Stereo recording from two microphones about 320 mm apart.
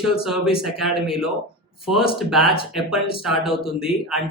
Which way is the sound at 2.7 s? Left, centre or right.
Centre.